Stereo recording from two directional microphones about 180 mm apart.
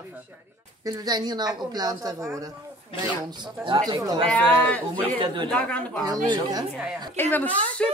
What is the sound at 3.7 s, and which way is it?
A woman's voice, 20° right (ahead or behind).